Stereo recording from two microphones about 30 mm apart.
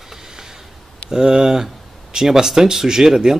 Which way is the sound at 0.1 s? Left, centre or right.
Centre.